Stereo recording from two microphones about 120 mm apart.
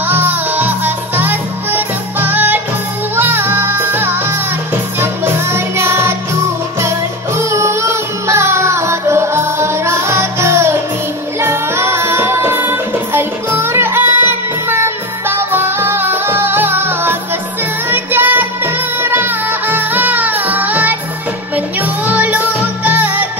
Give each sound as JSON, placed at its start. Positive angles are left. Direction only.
{"t": 0.0, "sound": "music", "side_deg": -15}
{"t": 7.3, "sound": "music", "side_deg": -25}